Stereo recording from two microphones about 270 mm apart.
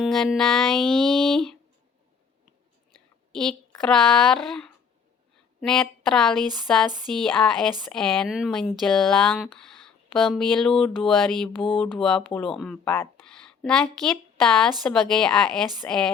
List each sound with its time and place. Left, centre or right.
0.0 s speech: centre
3.7 s speech: centre